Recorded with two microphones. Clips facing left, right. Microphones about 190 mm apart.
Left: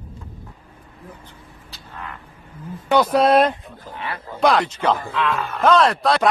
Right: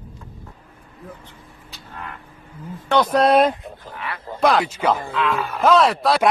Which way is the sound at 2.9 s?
5° left (ahead or behind).